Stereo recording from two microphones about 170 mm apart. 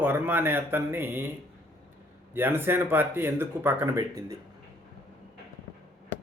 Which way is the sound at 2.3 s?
10° right (ahead or behind).